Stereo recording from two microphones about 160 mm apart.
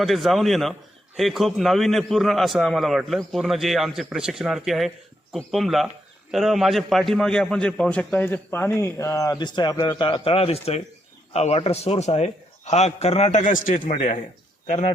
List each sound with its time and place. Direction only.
0.0 s a man's voice: centre (ahead or behind); by 13.7 s 55° left (ahead or behind)
13.8 s speech: 35° left (ahead or behind)